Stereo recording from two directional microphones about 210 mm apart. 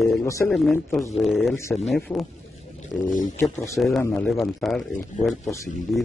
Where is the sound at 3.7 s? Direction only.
Centre (ahead or behind).